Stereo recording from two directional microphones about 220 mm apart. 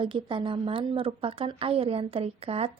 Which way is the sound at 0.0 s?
20° right (ahead or behind).